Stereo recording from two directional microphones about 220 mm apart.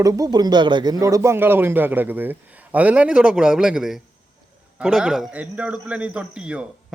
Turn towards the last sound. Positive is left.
turn(degrees=-5)  # may be behind; listen again after turning